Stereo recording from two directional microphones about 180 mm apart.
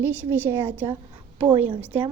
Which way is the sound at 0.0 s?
10° right (ahead or behind).